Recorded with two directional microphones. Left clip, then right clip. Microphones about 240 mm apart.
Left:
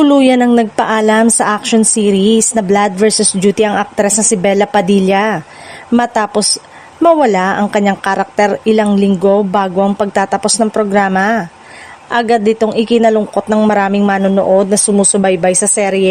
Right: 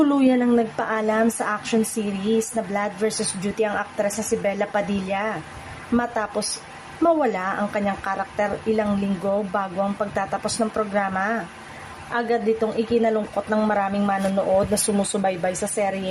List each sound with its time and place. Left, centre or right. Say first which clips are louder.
0.0 s a woman's voice: left 10 dB; left